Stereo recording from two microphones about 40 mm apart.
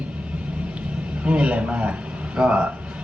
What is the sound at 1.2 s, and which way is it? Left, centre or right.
A man's voice, right.